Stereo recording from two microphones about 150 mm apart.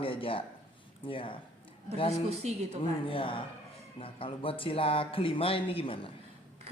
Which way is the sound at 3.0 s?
35° left (ahead or behind).